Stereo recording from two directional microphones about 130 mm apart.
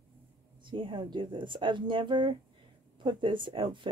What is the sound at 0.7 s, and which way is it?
Speech, 40° right (ahead or behind).